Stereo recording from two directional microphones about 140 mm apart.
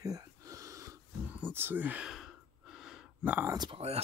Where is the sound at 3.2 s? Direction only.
10° right (ahead or behind).